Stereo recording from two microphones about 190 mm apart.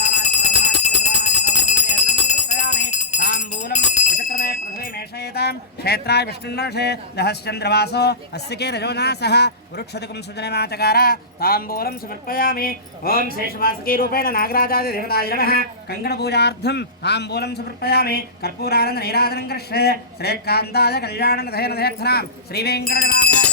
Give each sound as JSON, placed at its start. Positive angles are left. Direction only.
{"t": 1.2, "sound": "bell", "side_deg": 40}
{"t": 3.2, "sound": "jingle bell", "side_deg": 40}
{"t": 5.2, "sound": "speech", "side_deg": 55}